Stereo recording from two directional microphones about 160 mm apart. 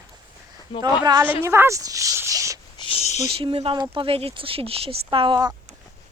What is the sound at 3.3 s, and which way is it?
Speech, 35° right (ahead or behind).